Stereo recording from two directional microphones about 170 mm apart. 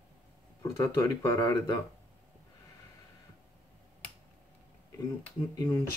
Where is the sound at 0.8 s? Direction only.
20° left (ahead or behind).